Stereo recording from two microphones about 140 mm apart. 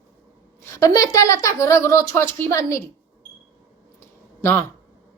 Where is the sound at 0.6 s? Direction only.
25° left (ahead or behind).